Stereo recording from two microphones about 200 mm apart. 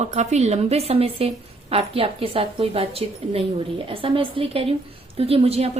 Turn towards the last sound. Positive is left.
turn(degrees=-30)  # may be behind; listen again after turning